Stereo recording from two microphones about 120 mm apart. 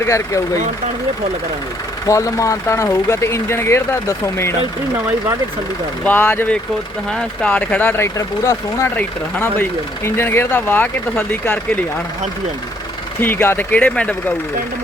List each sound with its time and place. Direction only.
0.0 s speech: 25° left (ahead or behind)
2.0 s speech: 25° left (ahead or behind)
6.1 s speech: 20° left (ahead or behind)
7.1 s speech: 10° left (ahead or behind)
13.2 s speech: 20° left (ahead or behind)